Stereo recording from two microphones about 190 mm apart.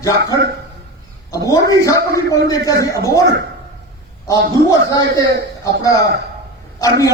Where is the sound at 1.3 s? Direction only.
20° left (ahead or behind).